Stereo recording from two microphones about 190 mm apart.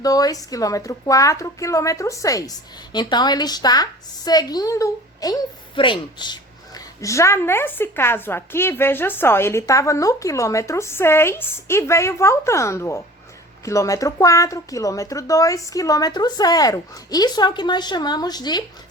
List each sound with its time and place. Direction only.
0.0 s a woman's voice: 20° left (ahead or behind)